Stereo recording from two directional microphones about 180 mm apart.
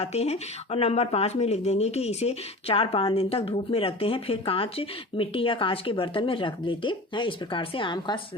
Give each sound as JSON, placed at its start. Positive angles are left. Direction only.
{"t": 0.0, "sound": "speech", "side_deg": 35}